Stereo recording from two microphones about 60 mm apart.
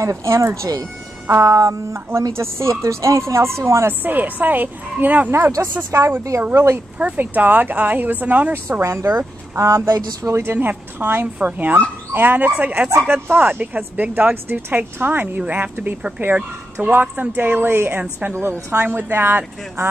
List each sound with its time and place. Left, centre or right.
0.0 s music: right
0.6 s speech: right
1.3 s music: right
2.3 s a woman's voice: right
4.0 s speech: right
5.6 s a woman's voice: right
6.5 s a woman's voice: right
7.2 s speech: right
8.8 s a woman's voice: right
14.3 s a woman's voice: right